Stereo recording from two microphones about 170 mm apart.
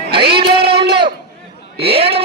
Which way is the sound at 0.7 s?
70° right (ahead or behind).